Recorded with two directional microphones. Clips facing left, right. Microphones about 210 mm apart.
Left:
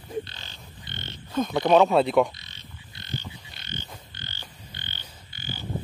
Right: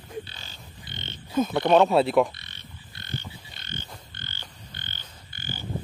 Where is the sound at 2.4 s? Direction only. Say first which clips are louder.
Even; 55° right (ahead or behind).